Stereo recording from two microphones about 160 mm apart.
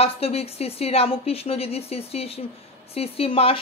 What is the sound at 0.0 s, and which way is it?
A woman's voice, 40° left (ahead or behind).